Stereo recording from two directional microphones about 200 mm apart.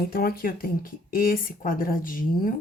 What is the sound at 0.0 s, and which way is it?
Speech, 50° left (ahead or behind).